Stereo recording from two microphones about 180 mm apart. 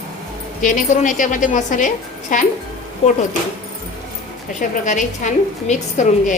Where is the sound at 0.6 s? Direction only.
45° left (ahead or behind).